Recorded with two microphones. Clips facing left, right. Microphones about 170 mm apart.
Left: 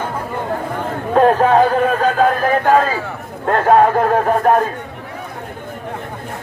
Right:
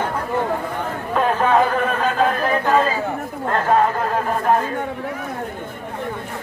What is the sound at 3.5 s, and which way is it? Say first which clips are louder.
Speech: left 6 dB; 60° left (ahead or behind).